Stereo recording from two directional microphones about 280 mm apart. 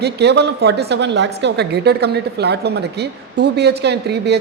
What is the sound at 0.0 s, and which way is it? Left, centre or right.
A woman's voice, right.